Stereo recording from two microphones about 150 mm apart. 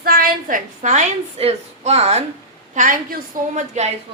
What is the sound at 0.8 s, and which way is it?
A woman's voice, 50° right (ahead or behind).